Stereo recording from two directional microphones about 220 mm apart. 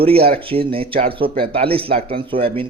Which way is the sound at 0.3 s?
25° right (ahead or behind).